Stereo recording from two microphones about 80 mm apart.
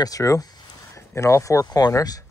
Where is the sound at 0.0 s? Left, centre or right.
Left.